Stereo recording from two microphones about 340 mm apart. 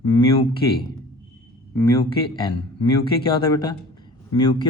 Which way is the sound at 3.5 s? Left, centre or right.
Centre.